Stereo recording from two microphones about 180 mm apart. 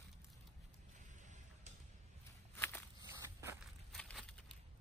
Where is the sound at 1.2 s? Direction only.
40° right (ahead or behind).